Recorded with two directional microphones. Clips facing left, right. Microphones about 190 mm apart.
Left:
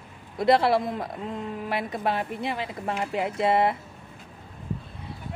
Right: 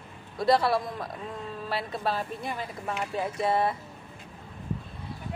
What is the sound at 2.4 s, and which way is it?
Speech, 75° left (ahead or behind).